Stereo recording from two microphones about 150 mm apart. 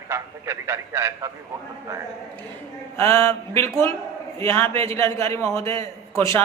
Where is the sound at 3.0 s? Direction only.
20° left (ahead or behind).